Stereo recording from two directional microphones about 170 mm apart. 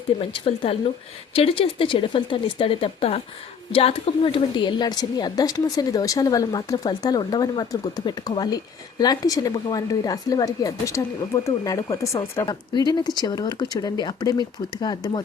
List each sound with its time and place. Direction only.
0.2 s a woman's voice: 35° left (ahead or behind)